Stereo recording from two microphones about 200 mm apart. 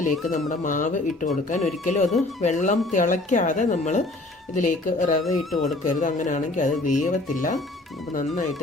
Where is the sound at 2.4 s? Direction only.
40° left (ahead or behind).